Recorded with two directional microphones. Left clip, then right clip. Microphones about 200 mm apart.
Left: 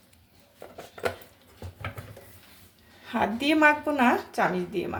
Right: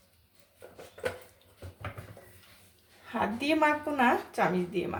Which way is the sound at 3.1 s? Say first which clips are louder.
Left 4 dB; 15° left (ahead or behind).